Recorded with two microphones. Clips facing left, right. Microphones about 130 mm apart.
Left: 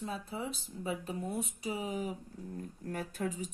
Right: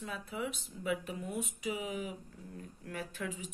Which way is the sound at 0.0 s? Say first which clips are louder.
Left 1 dB; 35° left (ahead or behind).